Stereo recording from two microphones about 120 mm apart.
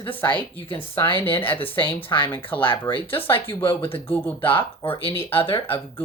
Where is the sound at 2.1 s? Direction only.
30° left (ahead or behind).